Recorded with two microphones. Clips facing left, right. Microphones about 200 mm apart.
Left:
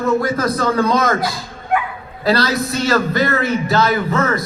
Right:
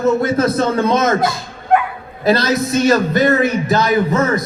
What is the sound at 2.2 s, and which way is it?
A man's voice, 20° right (ahead or behind).